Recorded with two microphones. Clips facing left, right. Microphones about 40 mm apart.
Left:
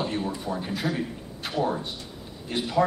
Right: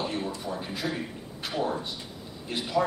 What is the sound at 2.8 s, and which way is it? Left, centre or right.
Speech, left.